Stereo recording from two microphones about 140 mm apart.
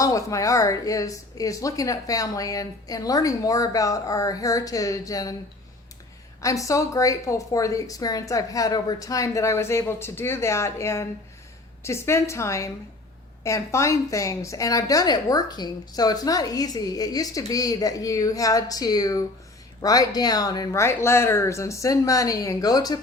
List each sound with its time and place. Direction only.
0.0 s a woman's voice: 25° left (ahead or behind)
6.4 s a woman's voice: 25° left (ahead or behind)